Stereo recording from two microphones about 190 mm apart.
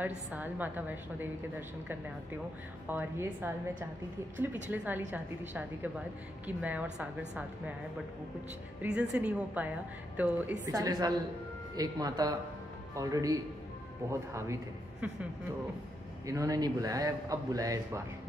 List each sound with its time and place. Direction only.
0.3 s speech: 10° right (ahead or behind)
2.9 s speech: 10° right (ahead or behind)
4.6 s speech: 10° right (ahead or behind)
8.8 s a man's voice: 5° right (ahead or behind)
16.3 s speech: 15° right (ahead or behind)